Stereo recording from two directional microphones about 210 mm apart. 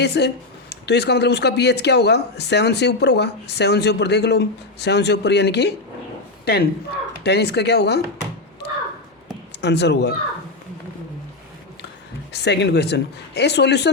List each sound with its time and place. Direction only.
0.0 s speech: 55° left (ahead or behind)
9.5 s speech: 55° left (ahead or behind)
12.3 s speech: 55° left (ahead or behind)